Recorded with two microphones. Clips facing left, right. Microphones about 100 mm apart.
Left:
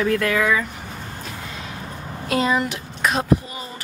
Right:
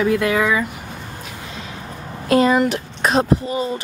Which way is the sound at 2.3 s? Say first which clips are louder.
Right 6 dB; 45° right (ahead or behind).